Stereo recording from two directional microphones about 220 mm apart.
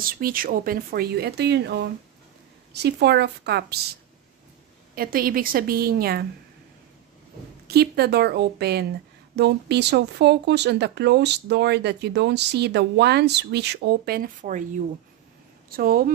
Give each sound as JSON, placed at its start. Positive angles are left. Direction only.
{"t": 0.0, "sound": "speech", "side_deg": -40}
{"t": 4.9, "sound": "a woman's voice", "side_deg": -40}
{"t": 7.6, "sound": "speech", "side_deg": -45}
{"t": 15.7, "sound": "a woman's voice", "side_deg": -40}